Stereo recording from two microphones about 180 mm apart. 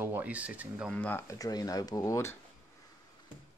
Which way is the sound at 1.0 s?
10° left (ahead or behind).